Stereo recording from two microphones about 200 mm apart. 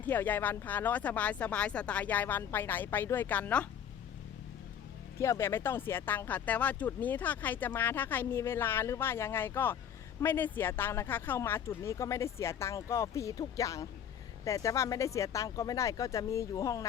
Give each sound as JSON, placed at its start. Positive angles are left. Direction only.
{"t": 0.0, "sound": "speech", "side_deg": 10}
{"t": 5.2, "sound": "speech", "side_deg": 15}